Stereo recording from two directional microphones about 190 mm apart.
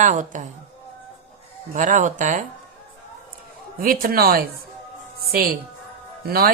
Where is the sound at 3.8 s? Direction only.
50° right (ahead or behind).